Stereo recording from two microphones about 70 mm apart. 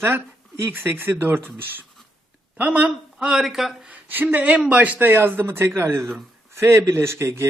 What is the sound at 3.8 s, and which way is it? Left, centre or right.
Speech, right.